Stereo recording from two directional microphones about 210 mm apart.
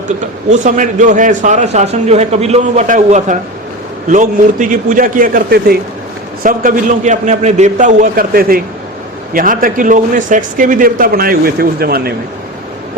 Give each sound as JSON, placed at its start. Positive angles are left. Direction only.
{"t": 0.5, "sound": "a man's voice", "side_deg": -35}